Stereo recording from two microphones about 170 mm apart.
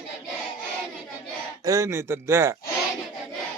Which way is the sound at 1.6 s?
20° right (ahead or behind).